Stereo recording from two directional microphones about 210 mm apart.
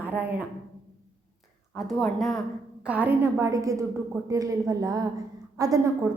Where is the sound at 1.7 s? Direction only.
Centre (ahead or behind).